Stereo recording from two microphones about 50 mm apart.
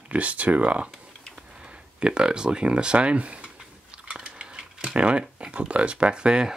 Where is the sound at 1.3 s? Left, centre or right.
Centre.